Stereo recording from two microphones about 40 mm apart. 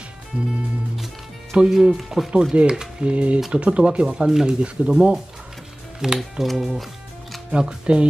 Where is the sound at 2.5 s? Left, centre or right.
Right.